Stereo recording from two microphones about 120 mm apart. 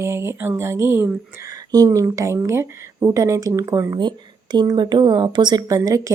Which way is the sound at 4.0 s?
35° right (ahead or behind).